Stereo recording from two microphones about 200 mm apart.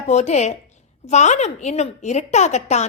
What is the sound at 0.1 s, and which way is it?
A woman's voice, 35° left (ahead or behind).